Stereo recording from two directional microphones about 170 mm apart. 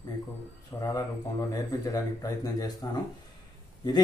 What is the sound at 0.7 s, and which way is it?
Speech, 20° left (ahead or behind).